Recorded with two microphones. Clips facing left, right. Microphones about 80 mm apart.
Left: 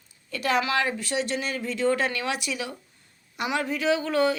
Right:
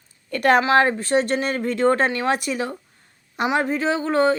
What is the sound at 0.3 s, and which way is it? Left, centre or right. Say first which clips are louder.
Speech: right 8 dB; right.